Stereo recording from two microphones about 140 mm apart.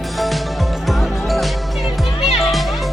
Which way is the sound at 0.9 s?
Centre (ahead or behind).